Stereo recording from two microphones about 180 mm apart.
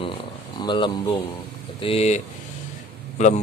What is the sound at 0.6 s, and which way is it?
Speech, 25° left (ahead or behind).